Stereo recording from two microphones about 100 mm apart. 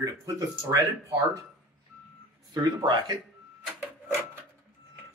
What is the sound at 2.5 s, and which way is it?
Speech, 45° right (ahead or behind).